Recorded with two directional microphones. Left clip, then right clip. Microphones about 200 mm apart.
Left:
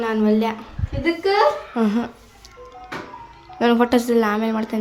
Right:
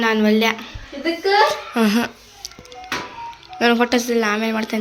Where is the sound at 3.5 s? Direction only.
10° left (ahead or behind).